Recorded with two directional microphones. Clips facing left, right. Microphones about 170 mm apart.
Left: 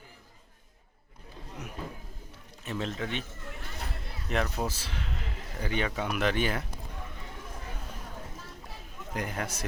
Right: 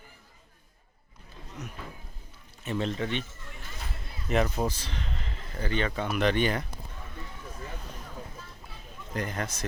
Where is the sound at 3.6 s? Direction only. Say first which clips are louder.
Left 1 dB; 65° left (ahead or behind).